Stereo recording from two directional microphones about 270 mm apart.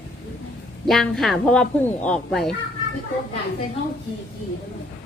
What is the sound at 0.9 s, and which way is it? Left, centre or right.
Speech, centre.